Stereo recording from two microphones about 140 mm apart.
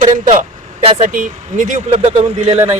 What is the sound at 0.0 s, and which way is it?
Speech, 60° right (ahead or behind).